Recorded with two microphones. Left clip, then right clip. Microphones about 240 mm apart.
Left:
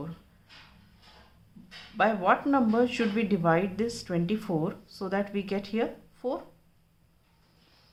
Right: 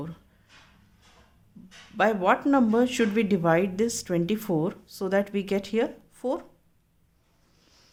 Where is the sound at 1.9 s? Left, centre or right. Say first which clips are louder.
Right 2 dB; right.